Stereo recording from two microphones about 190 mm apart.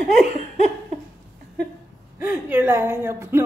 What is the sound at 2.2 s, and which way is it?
Speech, 10° right (ahead or behind).